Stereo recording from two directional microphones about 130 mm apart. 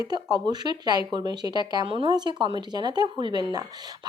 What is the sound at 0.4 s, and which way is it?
Speech, 30° right (ahead or behind).